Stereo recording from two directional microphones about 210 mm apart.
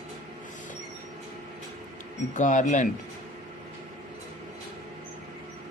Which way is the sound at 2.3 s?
35° left (ahead or behind).